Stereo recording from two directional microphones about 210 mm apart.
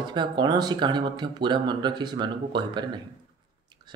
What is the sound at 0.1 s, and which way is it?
Speech, 20° right (ahead or behind).